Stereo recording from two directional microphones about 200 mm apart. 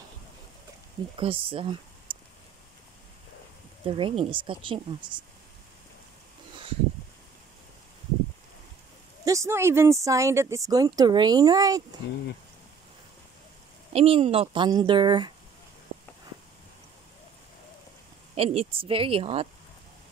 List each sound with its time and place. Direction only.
1.1 s speech: 25° right (ahead or behind)
3.8 s speech: 25° right (ahead or behind)
9.2 s speech: 15° right (ahead or behind)
13.9 s speech: 30° right (ahead or behind)
18.3 s speech: 30° right (ahead or behind)